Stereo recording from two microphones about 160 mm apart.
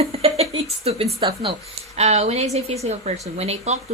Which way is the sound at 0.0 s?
40° right (ahead or behind).